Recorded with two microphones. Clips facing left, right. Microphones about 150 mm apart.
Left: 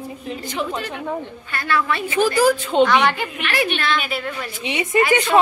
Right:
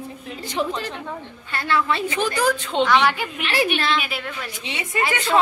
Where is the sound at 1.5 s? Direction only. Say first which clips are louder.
Even; 25° right (ahead or behind).